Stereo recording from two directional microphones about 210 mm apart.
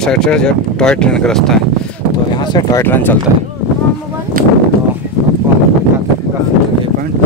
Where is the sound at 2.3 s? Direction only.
20° left (ahead or behind).